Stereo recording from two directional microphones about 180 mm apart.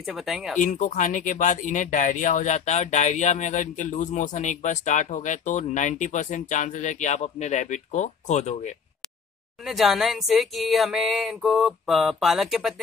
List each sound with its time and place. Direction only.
0.0 s speech: centre (ahead or behind)
0.6 s speech: 45° left (ahead or behind)
9.7 s speech: centre (ahead or behind)